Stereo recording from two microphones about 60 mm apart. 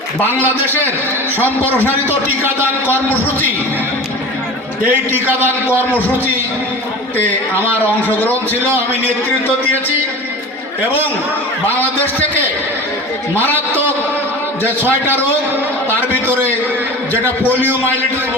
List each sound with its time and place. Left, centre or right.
0.3 s a man's voice: right
1.9 s a man's voice: right
4.9 s a man's voice: right
5.9 s a man's voice: left
8.0 s a man's voice: left
11.6 s a man's voice: left
13.3 s a man's voice: right